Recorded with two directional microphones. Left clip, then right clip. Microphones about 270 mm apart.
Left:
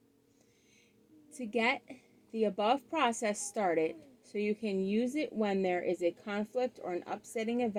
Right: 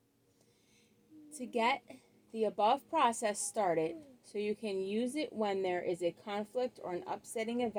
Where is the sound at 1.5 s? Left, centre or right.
Left.